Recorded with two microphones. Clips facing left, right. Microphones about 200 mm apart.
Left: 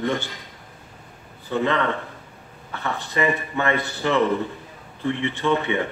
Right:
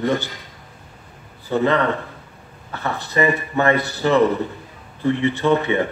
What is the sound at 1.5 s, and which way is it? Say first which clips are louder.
A man's voice: right 4 dB; 40° right (ahead or behind).